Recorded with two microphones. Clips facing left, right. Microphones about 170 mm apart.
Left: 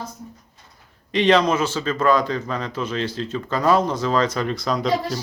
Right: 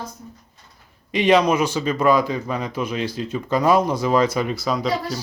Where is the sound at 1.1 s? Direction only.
10° right (ahead or behind).